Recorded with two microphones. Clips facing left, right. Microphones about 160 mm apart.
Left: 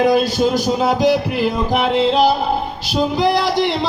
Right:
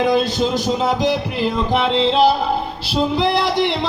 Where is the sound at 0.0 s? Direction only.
25° right (ahead or behind).